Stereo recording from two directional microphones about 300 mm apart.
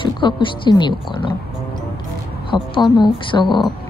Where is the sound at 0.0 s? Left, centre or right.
Centre.